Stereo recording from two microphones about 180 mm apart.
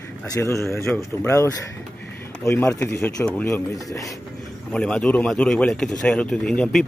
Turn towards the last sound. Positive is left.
turn(degrees=5)  # may be behind; listen again after turning